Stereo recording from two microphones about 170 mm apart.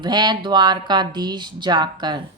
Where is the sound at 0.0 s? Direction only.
25° right (ahead or behind).